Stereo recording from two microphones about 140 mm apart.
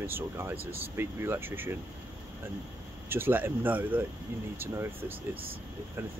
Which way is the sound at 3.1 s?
15° right (ahead or behind).